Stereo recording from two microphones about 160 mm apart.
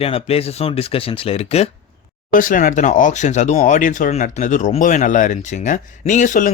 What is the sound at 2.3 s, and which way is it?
Speech, 55° left (ahead or behind).